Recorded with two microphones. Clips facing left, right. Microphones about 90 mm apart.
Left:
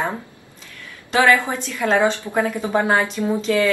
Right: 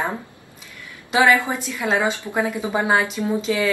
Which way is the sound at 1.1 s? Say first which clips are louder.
Left 1 dB; 15° right (ahead or behind).